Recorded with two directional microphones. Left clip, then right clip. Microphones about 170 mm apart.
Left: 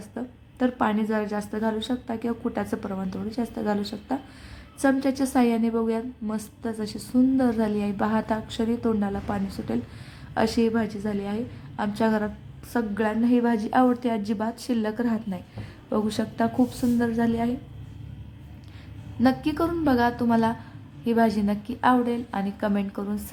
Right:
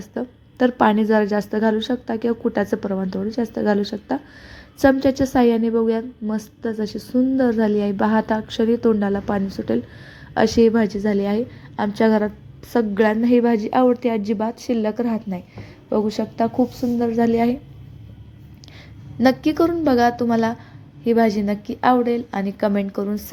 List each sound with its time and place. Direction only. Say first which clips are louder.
0.1 s a woman's voice: right 9 dB; 30° right (ahead or behind)
19.2 s a woman's voice: right 7 dB; 25° right (ahead or behind)